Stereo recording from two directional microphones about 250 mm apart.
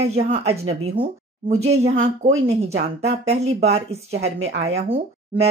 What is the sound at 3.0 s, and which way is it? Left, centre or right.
Speech, right.